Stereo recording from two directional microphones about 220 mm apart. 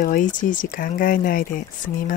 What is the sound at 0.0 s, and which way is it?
Speech, 40° left (ahead or behind).